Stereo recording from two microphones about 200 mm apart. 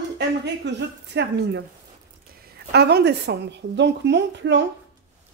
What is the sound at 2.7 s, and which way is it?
A woman's voice, 55° right (ahead or behind).